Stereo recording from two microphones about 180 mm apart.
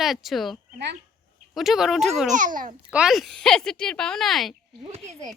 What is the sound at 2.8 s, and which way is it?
Speech, 5° right (ahead or behind).